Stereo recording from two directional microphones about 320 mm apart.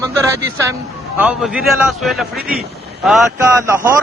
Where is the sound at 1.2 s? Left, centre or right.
Centre.